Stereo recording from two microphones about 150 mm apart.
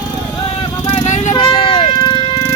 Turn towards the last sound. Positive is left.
turn(degrees=40)  # may be behind; listen again after turning